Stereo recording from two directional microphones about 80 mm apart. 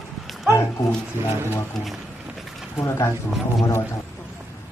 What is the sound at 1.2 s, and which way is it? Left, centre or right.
Speech, right.